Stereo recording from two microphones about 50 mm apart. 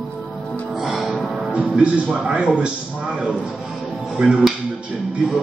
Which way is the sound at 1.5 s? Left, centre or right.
Right.